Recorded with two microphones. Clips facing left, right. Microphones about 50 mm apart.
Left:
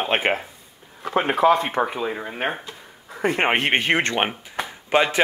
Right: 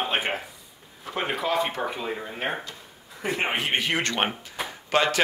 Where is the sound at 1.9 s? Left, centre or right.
Left.